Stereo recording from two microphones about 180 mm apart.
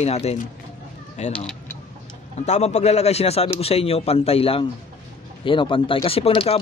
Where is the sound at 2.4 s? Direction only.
40° left (ahead or behind).